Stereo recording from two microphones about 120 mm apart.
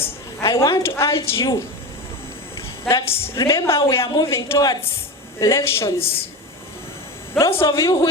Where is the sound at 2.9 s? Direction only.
25° left (ahead or behind).